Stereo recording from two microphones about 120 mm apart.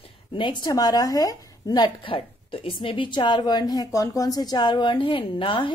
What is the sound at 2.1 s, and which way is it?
A woman's voice, 50° left (ahead or behind).